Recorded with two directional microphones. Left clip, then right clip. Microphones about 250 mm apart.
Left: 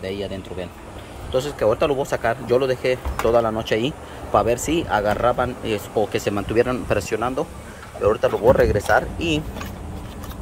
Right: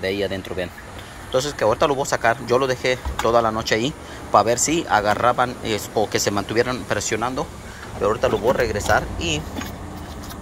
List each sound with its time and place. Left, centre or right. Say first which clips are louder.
0.0 s speech: right 5 dB; centre